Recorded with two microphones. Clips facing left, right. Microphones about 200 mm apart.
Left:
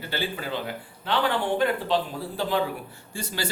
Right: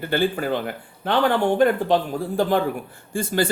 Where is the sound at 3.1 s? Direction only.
50° right (ahead or behind).